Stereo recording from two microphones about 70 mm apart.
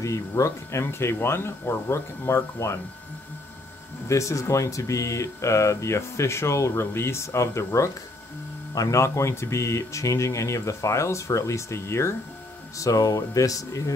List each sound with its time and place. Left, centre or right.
0.3 s speech: left
4.1 s speech: left
12.7 s speech: left